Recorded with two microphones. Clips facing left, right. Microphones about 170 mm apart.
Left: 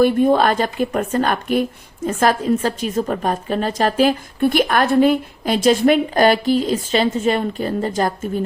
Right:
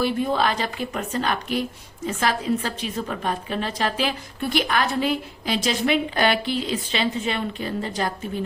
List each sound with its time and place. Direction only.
0.0 s a woman's voice: 50° left (ahead or behind)